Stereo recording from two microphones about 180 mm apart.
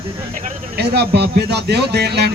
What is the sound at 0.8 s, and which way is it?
A man's voice, 65° right (ahead or behind).